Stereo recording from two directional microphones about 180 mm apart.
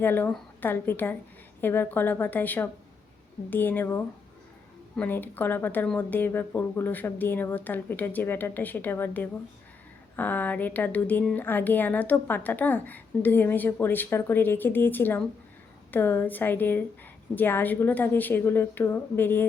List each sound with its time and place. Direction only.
0.0 s speech: 10° left (ahead or behind)